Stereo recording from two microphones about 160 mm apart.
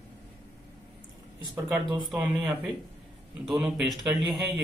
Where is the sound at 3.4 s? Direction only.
5° right (ahead or behind).